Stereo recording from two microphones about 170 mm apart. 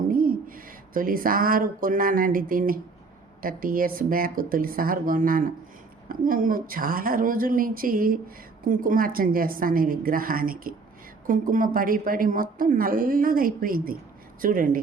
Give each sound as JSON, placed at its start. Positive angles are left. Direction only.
{"t": 0.1, "sound": "a woman's voice", "side_deg": -55}